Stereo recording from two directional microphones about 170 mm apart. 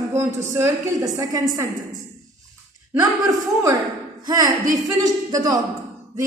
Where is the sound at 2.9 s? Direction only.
20° right (ahead or behind).